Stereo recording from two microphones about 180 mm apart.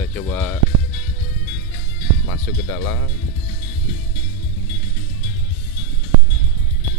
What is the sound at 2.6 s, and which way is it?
Speech, 15° left (ahead or behind).